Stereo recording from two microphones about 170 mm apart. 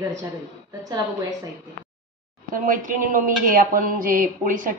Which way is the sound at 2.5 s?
50° right (ahead or behind).